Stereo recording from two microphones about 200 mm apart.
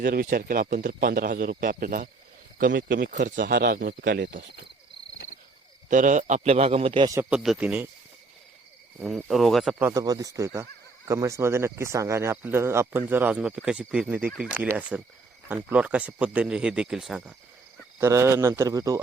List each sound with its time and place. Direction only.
0.0 s speech: 50° right (ahead or behind)
5.9 s a man's voice: 40° right (ahead or behind); by 7.2 s 25° right (ahead or behind)
7.2 s speech: 5° right (ahead or behind)
9.0 s speech: centre (ahead or behind)
9.7 s speech: 15° right (ahead or behind)